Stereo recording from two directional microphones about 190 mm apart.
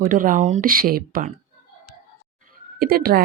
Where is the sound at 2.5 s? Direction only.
50° right (ahead or behind).